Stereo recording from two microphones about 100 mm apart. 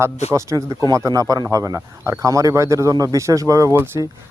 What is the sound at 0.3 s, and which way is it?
Speech, 35° right (ahead or behind).